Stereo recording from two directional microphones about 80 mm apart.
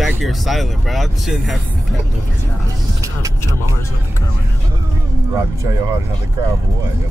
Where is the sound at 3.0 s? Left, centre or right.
Right.